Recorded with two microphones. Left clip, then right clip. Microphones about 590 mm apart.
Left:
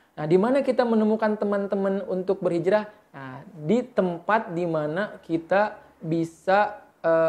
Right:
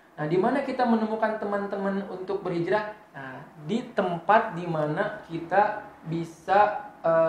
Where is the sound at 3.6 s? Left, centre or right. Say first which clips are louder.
Left 4 dB; left.